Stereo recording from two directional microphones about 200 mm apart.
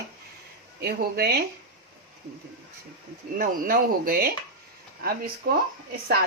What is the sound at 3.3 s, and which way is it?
Speech, 45° right (ahead or behind).